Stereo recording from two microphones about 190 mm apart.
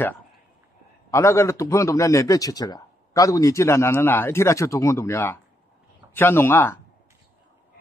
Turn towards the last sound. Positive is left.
turn(degrees=10)  # may be behind; listen again after turning